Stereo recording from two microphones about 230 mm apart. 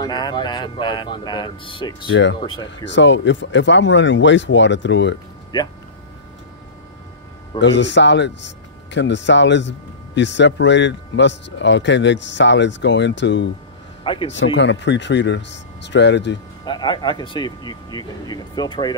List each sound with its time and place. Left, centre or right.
0.0 s speech: centre
2.8 s speech: left
7.6 s speech: left
16.6 s speech: centre